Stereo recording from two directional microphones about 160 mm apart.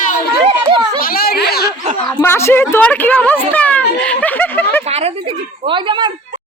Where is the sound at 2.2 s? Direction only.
15° left (ahead or behind).